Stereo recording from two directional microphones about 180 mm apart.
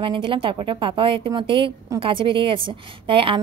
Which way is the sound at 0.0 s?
30° right (ahead or behind).